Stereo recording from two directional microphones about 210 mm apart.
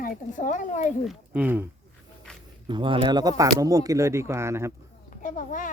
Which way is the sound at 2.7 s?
25° right (ahead or behind).